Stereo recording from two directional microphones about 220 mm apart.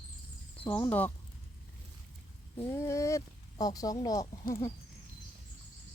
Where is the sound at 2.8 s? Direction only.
15° left (ahead or behind).